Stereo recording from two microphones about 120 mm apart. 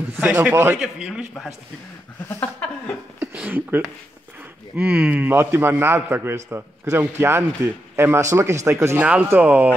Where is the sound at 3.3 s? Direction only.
15° right (ahead or behind).